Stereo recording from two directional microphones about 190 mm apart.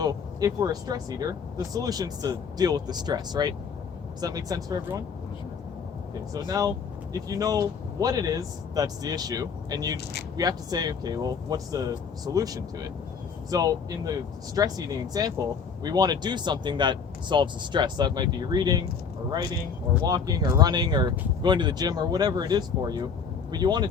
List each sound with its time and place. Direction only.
0.0 s speech: 20° right (ahead or behind)
6.3 s speech: 20° right (ahead or behind)
20.0 s speech: 20° right (ahead or behind)